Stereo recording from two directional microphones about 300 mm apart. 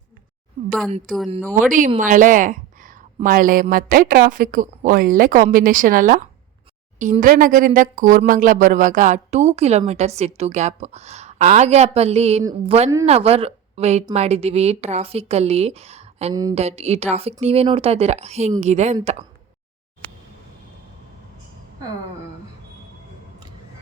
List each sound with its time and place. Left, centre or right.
0.9 s speech: right
1.4 s speech: centre
1.7 s speech: right